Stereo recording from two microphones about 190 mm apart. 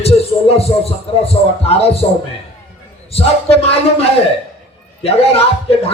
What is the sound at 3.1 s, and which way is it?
Speech, 30° left (ahead or behind).